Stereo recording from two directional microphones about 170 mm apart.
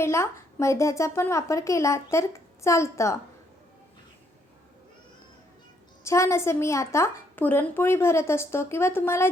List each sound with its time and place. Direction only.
0.0 s a woman's voice: 15° left (ahead or behind)
6.1 s a woman's voice: 15° left (ahead or behind)